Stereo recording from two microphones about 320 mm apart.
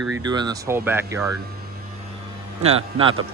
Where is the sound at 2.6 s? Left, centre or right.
Centre.